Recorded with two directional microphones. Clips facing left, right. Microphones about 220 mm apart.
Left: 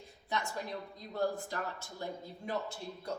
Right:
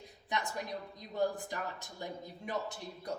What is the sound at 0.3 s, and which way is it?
A woman's voice, 15° right (ahead or behind).